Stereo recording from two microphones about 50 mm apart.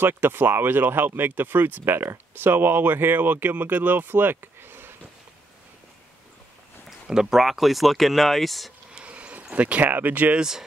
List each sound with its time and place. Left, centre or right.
0.0 s speech: right
6.9 s speech: centre
9.0 s a sound: right
9.8 s speech: right
10.3 s speech: centre